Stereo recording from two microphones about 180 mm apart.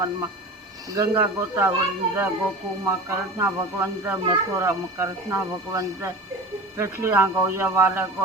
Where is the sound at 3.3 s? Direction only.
15° right (ahead or behind).